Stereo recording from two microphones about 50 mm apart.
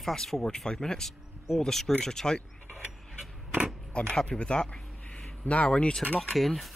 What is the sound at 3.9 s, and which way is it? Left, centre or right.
Speech, centre.